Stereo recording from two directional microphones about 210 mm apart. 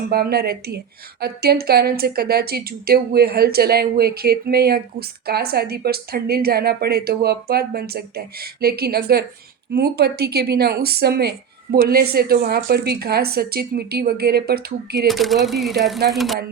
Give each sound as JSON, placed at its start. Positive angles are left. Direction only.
{"t": 0.1, "sound": "speech", "side_deg": -45}
{"t": 15.0, "sound": "speech", "side_deg": 0}